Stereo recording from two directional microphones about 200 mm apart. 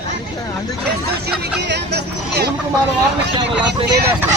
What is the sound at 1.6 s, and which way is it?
Speech, 55° right (ahead or behind).